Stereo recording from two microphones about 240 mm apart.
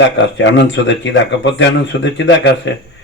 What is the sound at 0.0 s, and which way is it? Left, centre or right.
Speech, left.